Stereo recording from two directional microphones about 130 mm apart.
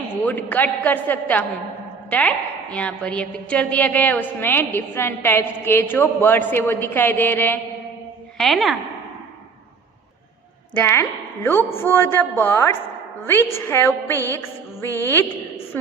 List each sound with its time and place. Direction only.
0.2 s a woman's voice: 15° left (ahead or behind)
8.4 s a woman's voice: centre (ahead or behind)
10.8 s a woman's voice: 15° left (ahead or behind)